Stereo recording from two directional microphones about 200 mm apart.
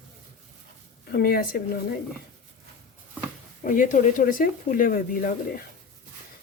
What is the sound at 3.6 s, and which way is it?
Speech, 40° left (ahead or behind).